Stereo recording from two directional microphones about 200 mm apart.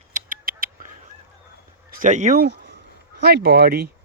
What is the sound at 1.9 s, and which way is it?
Speech, 40° right (ahead or behind).